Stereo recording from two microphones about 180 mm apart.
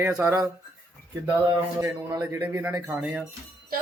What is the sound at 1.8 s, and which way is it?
Speech, 15° right (ahead or behind).